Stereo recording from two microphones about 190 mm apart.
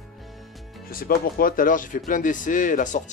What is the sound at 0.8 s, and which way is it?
Speech, 50° left (ahead or behind).